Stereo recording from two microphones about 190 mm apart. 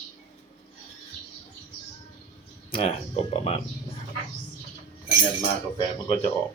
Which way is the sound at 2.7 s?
30° left (ahead or behind).